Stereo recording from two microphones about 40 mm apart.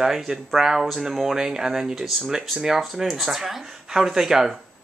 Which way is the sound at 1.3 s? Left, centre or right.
Centre.